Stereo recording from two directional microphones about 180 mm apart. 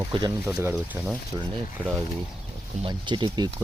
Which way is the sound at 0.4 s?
15° right (ahead or behind).